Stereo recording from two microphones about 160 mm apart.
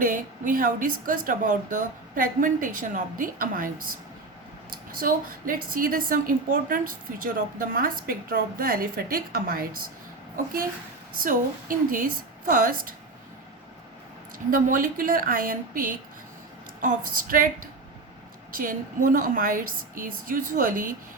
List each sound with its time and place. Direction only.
0.0 s a woman's voice: 55° right (ahead or behind)
4.9 s a woman's voice: 65° right (ahead or behind)
14.5 s a woman's voice: 60° right (ahead or behind)